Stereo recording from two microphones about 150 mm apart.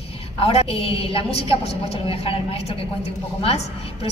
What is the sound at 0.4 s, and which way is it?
A woman's voice, 40° left (ahead or behind).